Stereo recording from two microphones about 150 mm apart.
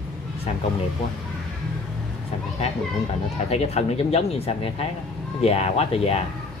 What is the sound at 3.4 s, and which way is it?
Speech, 45° left (ahead or behind).